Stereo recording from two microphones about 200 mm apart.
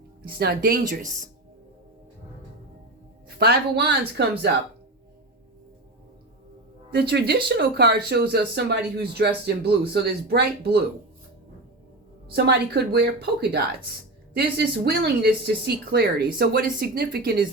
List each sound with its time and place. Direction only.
0.3 s speech: 50° right (ahead or behind)
3.2 s speech: 55° right (ahead or behind)
6.9 s speech: 55° right (ahead or behind)
12.3 s speech: 55° right (ahead or behind)